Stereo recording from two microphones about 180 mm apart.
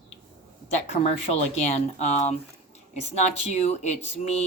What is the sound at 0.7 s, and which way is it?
Speech, 40° left (ahead or behind).